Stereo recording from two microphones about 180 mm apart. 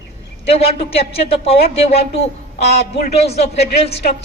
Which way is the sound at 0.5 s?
30° left (ahead or behind).